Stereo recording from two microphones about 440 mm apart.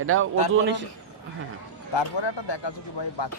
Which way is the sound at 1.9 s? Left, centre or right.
Left.